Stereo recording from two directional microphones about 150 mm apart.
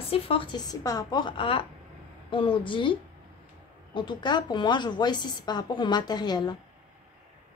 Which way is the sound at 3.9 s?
30° left (ahead or behind).